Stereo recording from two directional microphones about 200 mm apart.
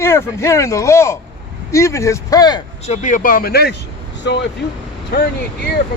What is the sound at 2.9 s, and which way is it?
Speech, 40° left (ahead or behind).